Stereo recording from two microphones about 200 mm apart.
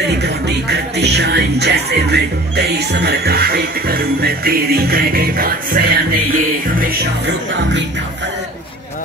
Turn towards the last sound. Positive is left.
turn(degrees=-60)  # may be behind; listen again after turning